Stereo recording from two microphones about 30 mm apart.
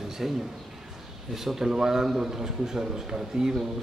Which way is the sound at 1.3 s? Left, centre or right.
Centre.